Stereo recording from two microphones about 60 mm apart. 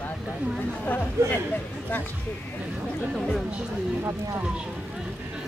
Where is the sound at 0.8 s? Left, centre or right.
Left.